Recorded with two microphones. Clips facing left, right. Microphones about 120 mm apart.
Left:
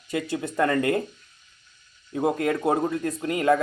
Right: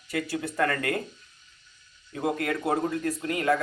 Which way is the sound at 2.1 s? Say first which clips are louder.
Left 4 dB; 25° left (ahead or behind).